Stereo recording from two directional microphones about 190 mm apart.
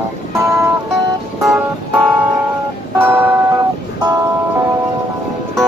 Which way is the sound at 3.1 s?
10° right (ahead or behind).